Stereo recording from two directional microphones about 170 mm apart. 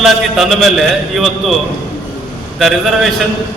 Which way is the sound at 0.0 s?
Centre (ahead or behind).